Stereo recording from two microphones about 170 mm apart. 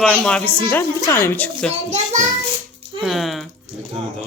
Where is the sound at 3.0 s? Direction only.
Centre (ahead or behind).